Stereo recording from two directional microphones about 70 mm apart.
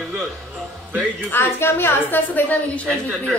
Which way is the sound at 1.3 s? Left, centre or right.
Left.